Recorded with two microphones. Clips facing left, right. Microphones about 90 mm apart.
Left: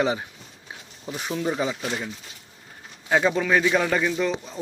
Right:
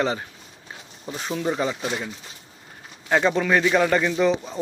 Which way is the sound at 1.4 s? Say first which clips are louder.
Right 1 dB; centre (ahead or behind).